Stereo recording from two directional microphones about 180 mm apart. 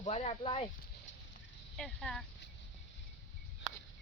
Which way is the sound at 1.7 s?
5° left (ahead or behind).